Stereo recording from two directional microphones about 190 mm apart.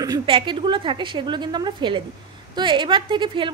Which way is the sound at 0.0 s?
25° right (ahead or behind).